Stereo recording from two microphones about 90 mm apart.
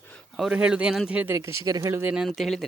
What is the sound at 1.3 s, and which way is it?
Speech, 30° right (ahead or behind).